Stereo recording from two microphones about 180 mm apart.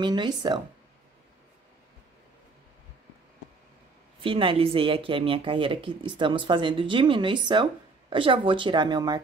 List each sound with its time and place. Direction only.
0.0 s speech: 25° right (ahead or behind)
4.2 s speech: 30° right (ahead or behind)